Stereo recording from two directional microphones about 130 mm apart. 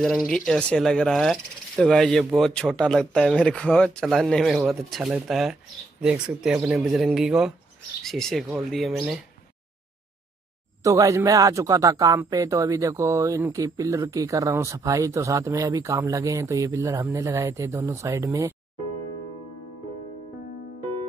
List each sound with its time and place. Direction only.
0.5 s speech: 5° left (ahead or behind)
10.8 s speech: 25° right (ahead or behind)